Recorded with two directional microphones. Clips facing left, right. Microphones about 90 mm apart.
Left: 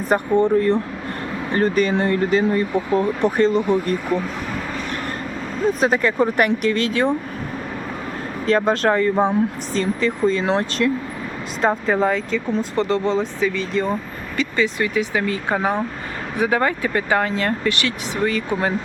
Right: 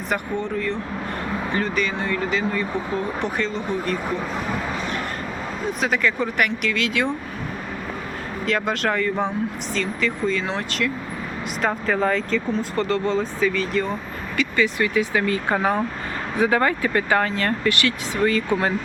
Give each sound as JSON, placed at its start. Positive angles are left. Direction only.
{"t": 0.1, "sound": "speech", "side_deg": 45}
{"t": 5.8, "sound": "speech", "side_deg": 40}
{"t": 8.4, "sound": "speech", "side_deg": 30}
{"t": 11.6, "sound": "speech", "side_deg": 20}